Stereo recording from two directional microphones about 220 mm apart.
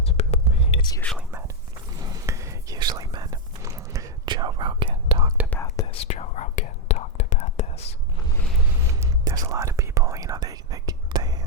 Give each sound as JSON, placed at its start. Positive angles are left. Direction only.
{"t": 0.2, "sound": "whispering", "side_deg": 25}
{"t": 1.9, "sound": "whispering", "side_deg": -15}
{"t": 5.5, "sound": "whispering", "side_deg": 10}
{"t": 5.8, "sound": "whispering", "side_deg": 25}
{"t": 8.9, "sound": "whispering", "side_deg": -15}